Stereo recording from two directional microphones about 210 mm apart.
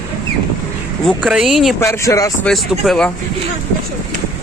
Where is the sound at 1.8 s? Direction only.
15° left (ahead or behind).